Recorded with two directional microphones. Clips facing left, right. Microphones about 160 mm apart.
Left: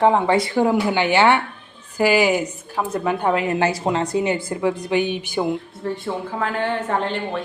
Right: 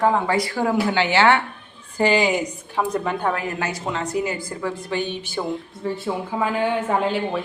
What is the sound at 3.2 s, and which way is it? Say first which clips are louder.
Speech: left 4 dB; 20° left (ahead or behind).